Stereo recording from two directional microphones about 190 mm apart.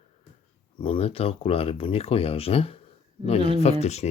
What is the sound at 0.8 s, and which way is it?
Speech, 30° left (ahead or behind).